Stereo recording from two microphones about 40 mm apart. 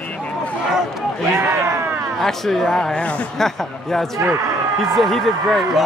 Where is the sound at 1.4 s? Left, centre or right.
Right.